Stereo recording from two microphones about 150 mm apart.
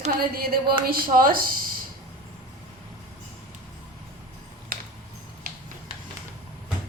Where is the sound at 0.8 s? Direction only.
75° right (ahead or behind).